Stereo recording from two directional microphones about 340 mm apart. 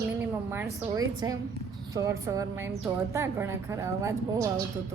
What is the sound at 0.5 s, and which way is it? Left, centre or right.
A woman's voice, centre.